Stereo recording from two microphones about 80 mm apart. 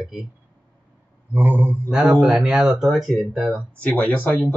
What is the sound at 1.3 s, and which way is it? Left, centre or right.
Speech, right.